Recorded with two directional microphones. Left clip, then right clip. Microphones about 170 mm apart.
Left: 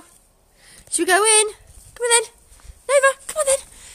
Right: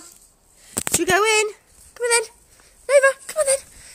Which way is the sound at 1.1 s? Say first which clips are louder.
Left 1 dB; 10° left (ahead or behind).